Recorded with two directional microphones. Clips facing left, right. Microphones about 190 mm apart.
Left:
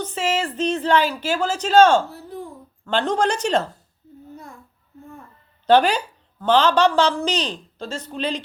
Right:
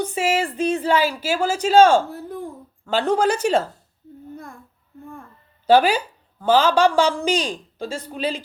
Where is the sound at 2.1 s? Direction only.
50° right (ahead or behind).